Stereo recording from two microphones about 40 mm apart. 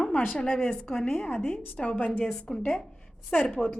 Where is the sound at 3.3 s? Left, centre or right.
Left.